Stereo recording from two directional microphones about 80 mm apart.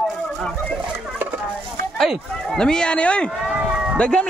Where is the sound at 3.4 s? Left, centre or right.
Centre.